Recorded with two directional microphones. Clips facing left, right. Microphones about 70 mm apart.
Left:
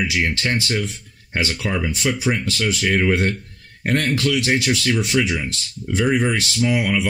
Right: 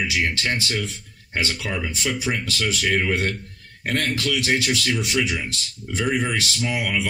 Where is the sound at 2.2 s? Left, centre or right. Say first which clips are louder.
Left 4 dB; left.